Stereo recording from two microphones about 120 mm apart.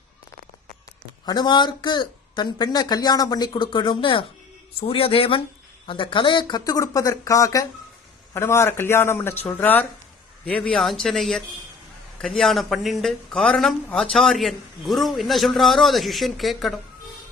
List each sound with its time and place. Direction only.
1.2 s a man's voice: 35° left (ahead or behind); by 16.8 s centre (ahead or behind)